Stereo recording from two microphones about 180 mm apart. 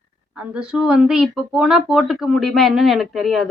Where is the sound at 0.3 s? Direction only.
5° right (ahead or behind).